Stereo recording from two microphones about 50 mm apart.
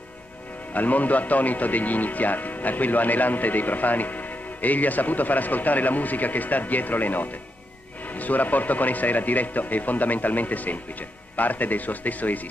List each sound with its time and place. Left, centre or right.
0.7 s speech: left